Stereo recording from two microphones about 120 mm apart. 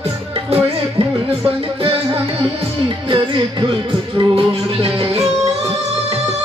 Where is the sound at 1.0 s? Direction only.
50° right (ahead or behind).